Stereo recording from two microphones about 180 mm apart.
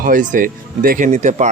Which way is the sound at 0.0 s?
45° right (ahead or behind).